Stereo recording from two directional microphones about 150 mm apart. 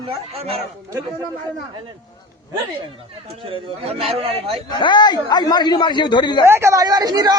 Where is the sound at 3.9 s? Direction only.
40° right (ahead or behind).